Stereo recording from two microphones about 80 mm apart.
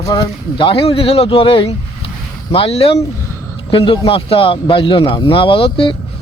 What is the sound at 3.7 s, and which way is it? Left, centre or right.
Speech, left.